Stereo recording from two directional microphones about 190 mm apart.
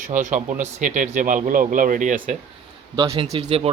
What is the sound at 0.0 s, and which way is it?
Speech, 40° right (ahead or behind).